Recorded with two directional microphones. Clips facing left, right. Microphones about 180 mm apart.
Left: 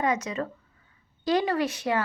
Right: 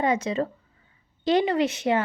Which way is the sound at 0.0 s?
30° right (ahead or behind).